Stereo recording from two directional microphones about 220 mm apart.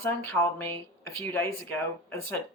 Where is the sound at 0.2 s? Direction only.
10° left (ahead or behind).